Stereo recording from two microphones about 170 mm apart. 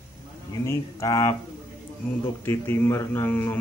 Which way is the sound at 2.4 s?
15° left (ahead or behind).